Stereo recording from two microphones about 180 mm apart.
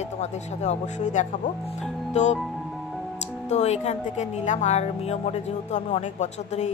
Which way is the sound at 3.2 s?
40° left (ahead or behind).